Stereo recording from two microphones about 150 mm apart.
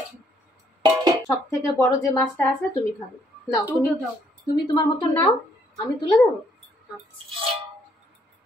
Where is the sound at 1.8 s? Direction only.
15° left (ahead or behind).